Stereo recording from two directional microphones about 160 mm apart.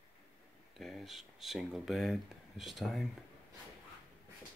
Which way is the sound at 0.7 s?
Centre (ahead or behind).